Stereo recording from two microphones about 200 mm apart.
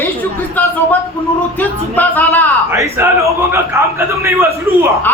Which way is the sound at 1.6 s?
10° left (ahead or behind).